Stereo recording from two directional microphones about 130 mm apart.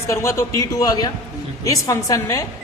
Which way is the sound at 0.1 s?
20° left (ahead or behind).